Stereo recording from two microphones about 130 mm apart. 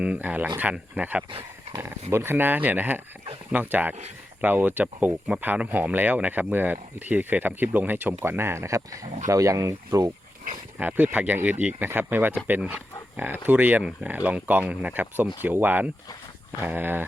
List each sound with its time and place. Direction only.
0.0 s speech: 10° right (ahead or behind); by 10.1 s 25° right (ahead or behind)
10.8 s speech: 10° right (ahead or behind)